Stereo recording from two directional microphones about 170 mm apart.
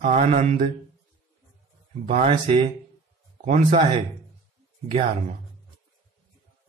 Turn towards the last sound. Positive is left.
turn(degrees=-40)  # may be behind; listen again after turning